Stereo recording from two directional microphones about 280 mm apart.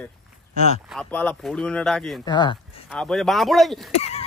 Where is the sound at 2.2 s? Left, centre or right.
Centre.